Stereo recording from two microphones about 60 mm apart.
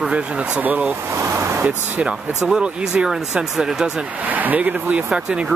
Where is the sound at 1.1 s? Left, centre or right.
Right.